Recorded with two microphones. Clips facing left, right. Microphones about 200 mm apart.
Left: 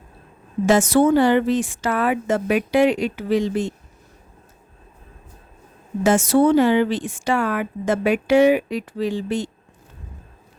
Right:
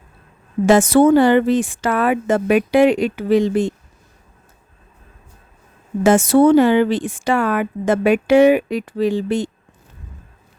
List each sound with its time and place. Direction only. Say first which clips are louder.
0.6 s speech: right 4 dB; 55° right (ahead or behind)
6.0 s speech: right 4 dB; 55° right (ahead or behind)